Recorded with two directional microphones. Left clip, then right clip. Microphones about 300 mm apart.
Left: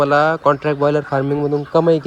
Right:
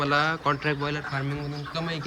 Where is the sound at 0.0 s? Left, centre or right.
Centre.